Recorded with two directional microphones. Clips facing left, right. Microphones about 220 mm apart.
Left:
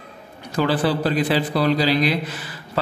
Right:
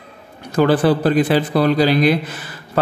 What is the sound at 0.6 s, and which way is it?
A man's voice, 50° right (ahead or behind).